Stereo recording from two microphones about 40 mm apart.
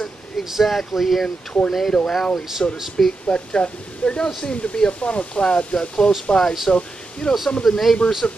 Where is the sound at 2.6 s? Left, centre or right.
Left.